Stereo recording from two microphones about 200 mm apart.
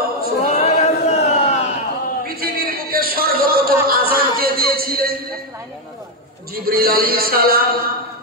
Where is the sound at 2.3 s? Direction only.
50° right (ahead or behind).